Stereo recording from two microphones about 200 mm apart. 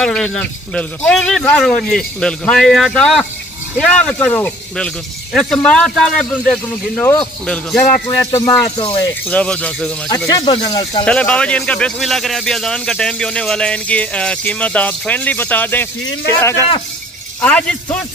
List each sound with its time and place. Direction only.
0.0 s a man's voice: 5° left (ahead or behind)
10.0 s speech: 15° left (ahead or behind)
11.1 s a man's voice: 5° left (ahead or behind)